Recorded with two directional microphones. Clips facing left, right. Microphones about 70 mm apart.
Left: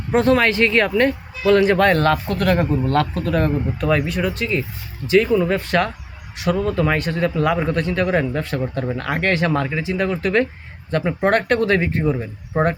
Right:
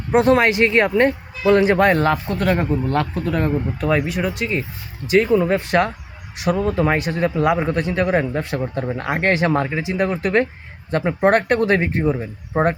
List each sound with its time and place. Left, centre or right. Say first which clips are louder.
0.1 s speech: right 1 dB; right
5.0 s speech: even; right
7.0 s speech: right 1 dB; centre